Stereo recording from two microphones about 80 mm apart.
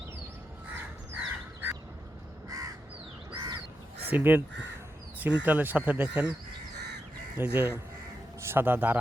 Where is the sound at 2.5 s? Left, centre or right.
Right.